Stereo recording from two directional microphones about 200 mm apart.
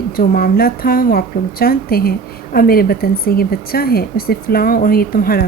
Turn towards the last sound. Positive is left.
turn(degrees=45)  # may be behind; listen again after turning